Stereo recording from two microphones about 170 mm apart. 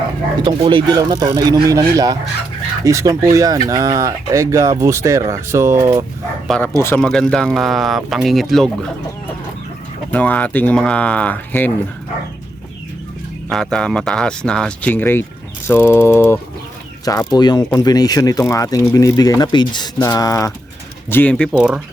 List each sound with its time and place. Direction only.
0.4 s speech: 30° right (ahead or behind)
6.5 s speech: 5° left (ahead or behind)
10.1 s speech: 10° left (ahead or behind)
13.5 s speech: 5° left (ahead or behind)